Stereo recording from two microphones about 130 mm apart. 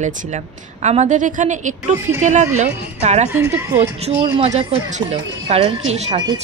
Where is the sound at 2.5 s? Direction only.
60° right (ahead or behind).